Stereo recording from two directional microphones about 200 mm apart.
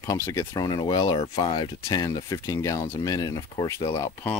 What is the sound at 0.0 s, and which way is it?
Speech, 15° left (ahead or behind).